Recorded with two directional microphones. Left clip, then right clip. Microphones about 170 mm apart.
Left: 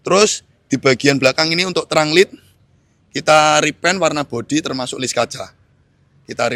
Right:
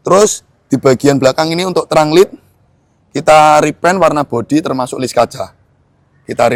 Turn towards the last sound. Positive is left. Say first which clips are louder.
# right 8 dB
turn(degrees=-15)  # may be behind; listen again after turning